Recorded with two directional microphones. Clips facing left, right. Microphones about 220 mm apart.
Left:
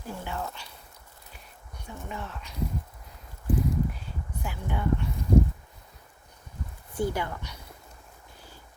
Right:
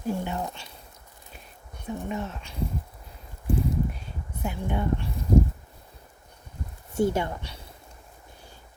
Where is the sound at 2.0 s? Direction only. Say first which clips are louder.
Right 6 dB; 20° right (ahead or behind).